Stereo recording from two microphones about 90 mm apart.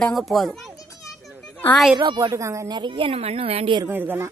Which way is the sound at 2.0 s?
55° right (ahead or behind).